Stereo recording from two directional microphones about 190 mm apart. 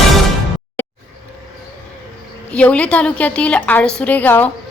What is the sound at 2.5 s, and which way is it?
A woman's voice, 5° left (ahead or behind).